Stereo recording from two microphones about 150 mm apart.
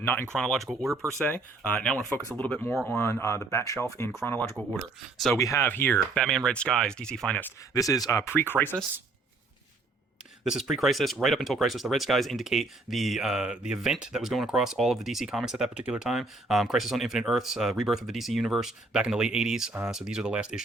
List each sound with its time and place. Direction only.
0.0 s speech: 15° left (ahead or behind)
0.3 s speech: 5° left (ahead or behind)
6.2 s speech: 5° left (ahead or behind)
7.7 s speech: 20° left (ahead or behind)
10.4 s speech: 5° right (ahead or behind)